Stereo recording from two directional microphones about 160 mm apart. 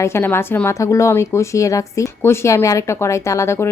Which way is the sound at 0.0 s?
15° left (ahead or behind).